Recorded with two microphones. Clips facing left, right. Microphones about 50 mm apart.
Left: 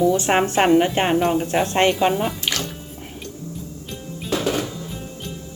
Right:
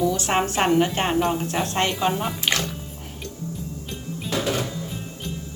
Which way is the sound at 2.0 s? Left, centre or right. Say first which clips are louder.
Left 4 dB; centre.